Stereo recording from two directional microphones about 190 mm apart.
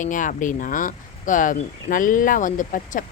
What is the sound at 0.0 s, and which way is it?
Speech, 45° left (ahead or behind).